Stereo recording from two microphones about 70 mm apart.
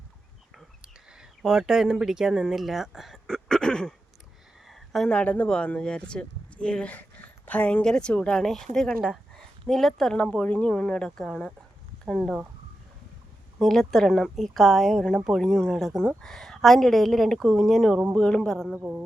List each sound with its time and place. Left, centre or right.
1.4 s speech: centre
3.2 s a sound: centre
5.0 s speech: centre
6.9 s a sound: left
7.9 s speech: centre
8.4 s speech: centre
9.3 s a sound: centre
10.2 s speech: centre
13.6 s speech: centre
18.1 s speech: centre